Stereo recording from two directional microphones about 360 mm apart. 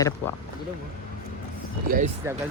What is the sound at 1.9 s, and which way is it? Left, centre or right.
Speech, right.